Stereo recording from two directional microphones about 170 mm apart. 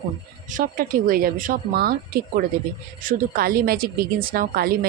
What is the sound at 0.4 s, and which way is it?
Speech, 50° right (ahead or behind).